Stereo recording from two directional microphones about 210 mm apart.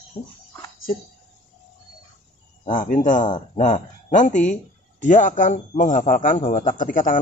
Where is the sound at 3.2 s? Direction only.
20° left (ahead or behind).